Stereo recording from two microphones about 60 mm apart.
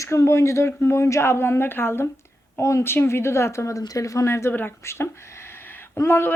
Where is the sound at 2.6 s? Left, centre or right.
Left.